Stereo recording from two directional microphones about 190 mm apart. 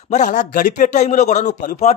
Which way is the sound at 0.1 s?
40° left (ahead or behind).